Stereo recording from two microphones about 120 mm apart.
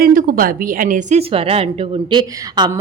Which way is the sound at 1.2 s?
55° right (ahead or behind).